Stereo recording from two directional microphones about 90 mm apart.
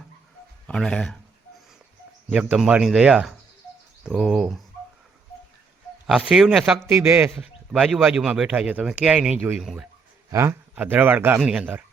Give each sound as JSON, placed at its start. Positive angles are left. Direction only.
{"t": 0.7, "sound": "speech", "side_deg": 10}
{"t": 2.3, "sound": "speech", "side_deg": -10}
{"t": 4.1, "sound": "speech", "side_deg": 0}
{"t": 6.1, "sound": "speech", "side_deg": -10}
{"t": 6.8, "sound": "speech", "side_deg": -25}
{"t": 7.7, "sound": "speech", "side_deg": 0}
{"t": 10.2, "sound": "a man's voice", "side_deg": -30}
{"t": 11.3, "sound": "speech", "side_deg": -10}